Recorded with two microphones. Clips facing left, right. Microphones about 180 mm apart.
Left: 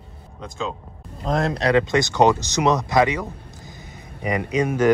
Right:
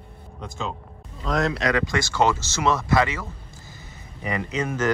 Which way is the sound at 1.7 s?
25° left (ahead or behind).